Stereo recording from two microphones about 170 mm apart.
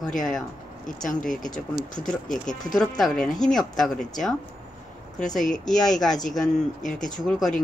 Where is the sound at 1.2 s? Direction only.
50° left (ahead or behind).